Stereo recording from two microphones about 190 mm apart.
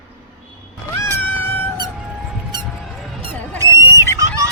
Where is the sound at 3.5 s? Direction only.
15° right (ahead or behind).